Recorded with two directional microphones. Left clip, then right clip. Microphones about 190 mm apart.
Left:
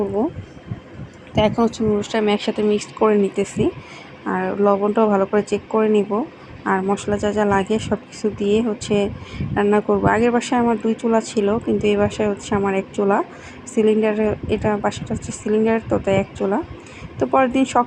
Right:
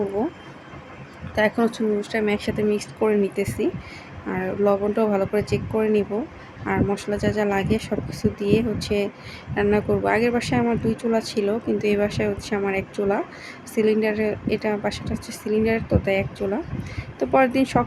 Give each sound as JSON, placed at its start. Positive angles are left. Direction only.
{"t": 1.4, "sound": "speech", "side_deg": 15}